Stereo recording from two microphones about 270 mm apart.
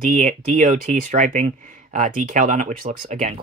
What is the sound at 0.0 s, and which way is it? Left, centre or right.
Speech, right.